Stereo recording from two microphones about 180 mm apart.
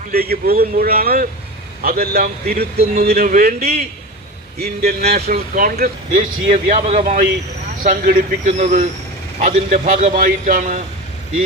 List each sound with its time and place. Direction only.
0.1 s a man's voice: 60° right (ahead or behind)
6.5 s speech: 40° right (ahead or behind)
7.8 s a man's voice: 50° right (ahead or behind)